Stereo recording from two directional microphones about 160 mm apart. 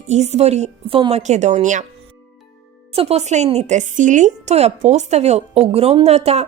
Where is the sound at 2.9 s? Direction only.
40° right (ahead or behind).